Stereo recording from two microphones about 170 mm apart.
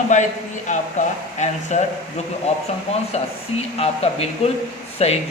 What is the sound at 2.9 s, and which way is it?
Speech, 40° left (ahead or behind).